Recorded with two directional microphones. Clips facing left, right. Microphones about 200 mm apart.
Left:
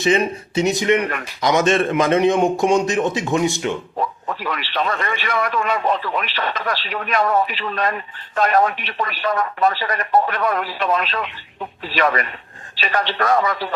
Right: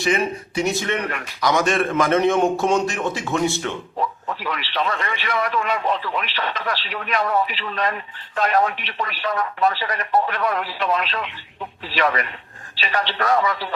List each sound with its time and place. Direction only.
0.0 s a man's voice: 25° left (ahead or behind)
4.4 s a man's voice: 45° left (ahead or behind)